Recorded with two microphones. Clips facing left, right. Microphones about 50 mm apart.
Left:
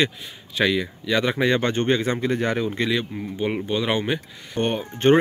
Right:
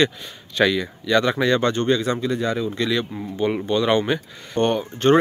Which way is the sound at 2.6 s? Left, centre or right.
Left.